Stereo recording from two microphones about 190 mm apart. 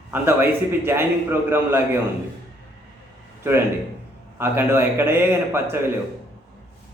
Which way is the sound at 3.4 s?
15° right (ahead or behind).